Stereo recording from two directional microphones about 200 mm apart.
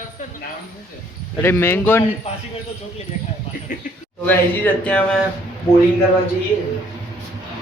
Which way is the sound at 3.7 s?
45° left (ahead or behind).